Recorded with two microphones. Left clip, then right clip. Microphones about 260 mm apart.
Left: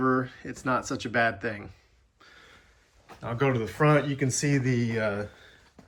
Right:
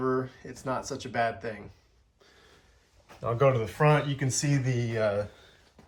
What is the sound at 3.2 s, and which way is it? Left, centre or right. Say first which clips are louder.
Speech: right 3 dB; right.